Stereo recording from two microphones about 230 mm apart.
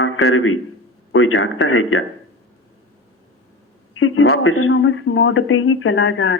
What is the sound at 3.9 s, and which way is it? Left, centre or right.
Speech, left.